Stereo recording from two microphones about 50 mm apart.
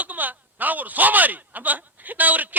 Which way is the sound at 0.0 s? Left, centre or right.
Right.